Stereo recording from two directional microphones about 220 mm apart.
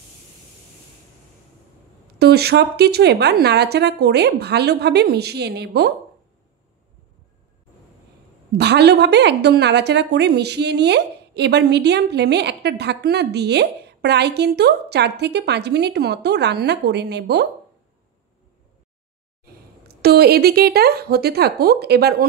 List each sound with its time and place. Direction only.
2.1 s a woman's voice: 45° right (ahead or behind)
8.5 s a woman's voice: 50° right (ahead or behind)
20.0 s a woman's voice: 45° right (ahead or behind)